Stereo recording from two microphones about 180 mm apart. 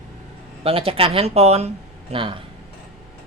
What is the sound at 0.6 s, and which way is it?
Speech, 30° right (ahead or behind).